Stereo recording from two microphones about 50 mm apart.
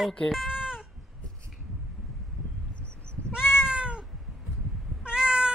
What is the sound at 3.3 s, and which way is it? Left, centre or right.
Cat, centre.